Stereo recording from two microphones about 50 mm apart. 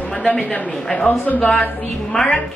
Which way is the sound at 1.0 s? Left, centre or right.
Left.